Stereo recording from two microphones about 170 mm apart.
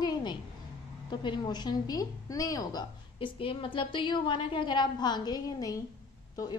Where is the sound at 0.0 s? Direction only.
25° left (ahead or behind).